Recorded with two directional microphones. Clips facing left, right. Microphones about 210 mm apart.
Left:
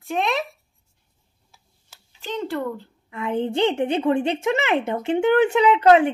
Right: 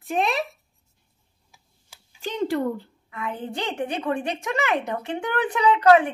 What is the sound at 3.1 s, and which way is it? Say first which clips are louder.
A woman's voice: left 8 dB; 25° left (ahead or behind).